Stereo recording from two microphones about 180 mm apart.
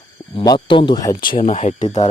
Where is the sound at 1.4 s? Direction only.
35° left (ahead or behind).